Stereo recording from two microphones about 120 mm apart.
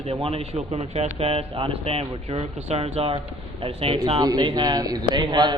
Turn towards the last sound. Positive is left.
turn(degrees=-40)  # may be behind; listen again after turning